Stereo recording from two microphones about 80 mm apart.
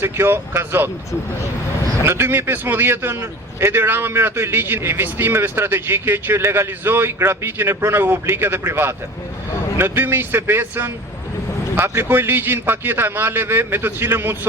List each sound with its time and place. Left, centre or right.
0.0 s speech: right
2.0 s a man's voice: right